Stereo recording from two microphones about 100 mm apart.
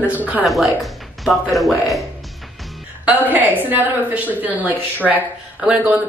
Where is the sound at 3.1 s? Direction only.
15° right (ahead or behind).